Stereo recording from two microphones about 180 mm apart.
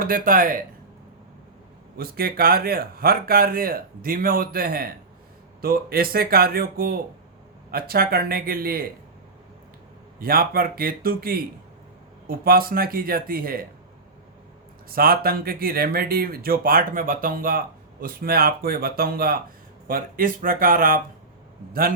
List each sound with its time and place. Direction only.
0.0 s speech: 50° right (ahead or behind)
2.0 s speech: 55° right (ahead or behind)
10.2 s speech: 55° right (ahead or behind)
14.8 s speech: 55° right (ahead or behind)